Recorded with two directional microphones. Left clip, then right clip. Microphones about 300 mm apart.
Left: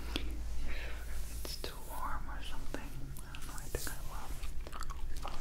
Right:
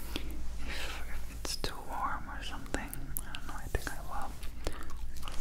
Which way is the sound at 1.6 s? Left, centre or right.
Centre.